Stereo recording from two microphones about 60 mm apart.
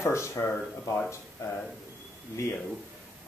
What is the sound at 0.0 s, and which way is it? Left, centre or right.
Speech, left.